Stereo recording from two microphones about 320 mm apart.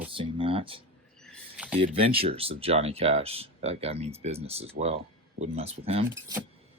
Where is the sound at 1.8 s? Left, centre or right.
Centre.